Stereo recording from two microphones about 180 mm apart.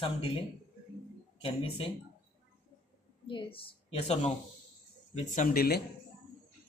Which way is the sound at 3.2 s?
30° left (ahead or behind).